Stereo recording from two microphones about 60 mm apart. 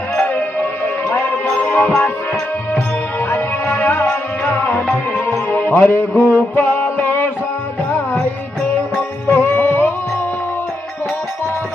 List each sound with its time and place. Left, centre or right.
1.1 s music: left
3.3 s music: left
5.5 s music: left
9.2 s music: left